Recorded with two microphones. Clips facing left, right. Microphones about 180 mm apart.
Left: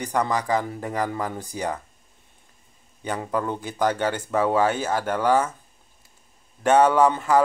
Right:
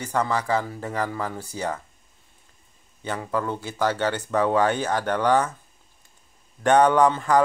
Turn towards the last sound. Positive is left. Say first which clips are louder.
# even
turn(degrees=5)  # may be behind; listen again after turning